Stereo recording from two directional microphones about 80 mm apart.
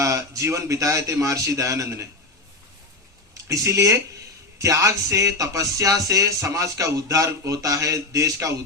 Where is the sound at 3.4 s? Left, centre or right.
Right.